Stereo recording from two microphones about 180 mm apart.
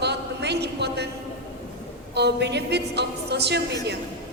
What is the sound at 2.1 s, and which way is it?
A man's voice, 70° right (ahead or behind).